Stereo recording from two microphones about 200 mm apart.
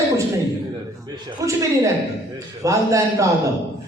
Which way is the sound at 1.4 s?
15° right (ahead or behind).